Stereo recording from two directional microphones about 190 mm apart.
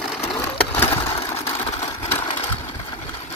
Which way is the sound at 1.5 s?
30° left (ahead or behind).